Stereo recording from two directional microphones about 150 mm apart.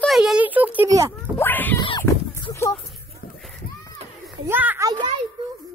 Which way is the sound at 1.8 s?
30° left (ahead or behind).